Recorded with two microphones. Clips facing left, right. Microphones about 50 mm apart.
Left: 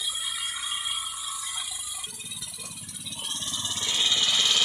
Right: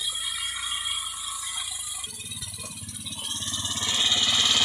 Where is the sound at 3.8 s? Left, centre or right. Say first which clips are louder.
Right 1 dB; centre.